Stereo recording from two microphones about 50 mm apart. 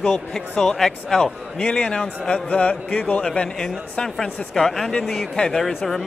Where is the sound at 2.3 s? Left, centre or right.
Left.